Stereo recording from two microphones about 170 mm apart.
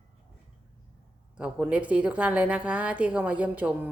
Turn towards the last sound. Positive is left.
turn(degrees=-10)  # may be behind; listen again after turning